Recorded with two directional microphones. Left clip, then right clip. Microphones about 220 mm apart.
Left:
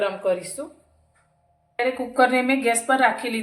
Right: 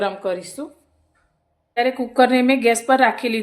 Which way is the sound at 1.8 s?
50° right (ahead or behind).